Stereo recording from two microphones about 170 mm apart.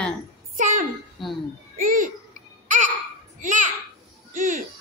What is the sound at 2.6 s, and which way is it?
Babbling, 50° right (ahead or behind).